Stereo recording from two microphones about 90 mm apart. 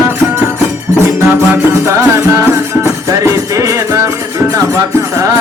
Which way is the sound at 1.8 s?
30° right (ahead or behind).